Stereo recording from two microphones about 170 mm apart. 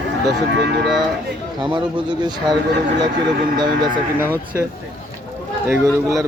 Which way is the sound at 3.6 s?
25° right (ahead or behind).